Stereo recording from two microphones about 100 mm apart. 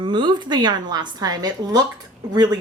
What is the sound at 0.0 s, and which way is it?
Speech, 50° right (ahead or behind).